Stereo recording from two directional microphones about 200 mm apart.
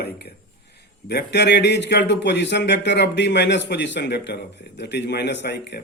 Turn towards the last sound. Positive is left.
turn(degrees=55)  # may be behind; listen again after turning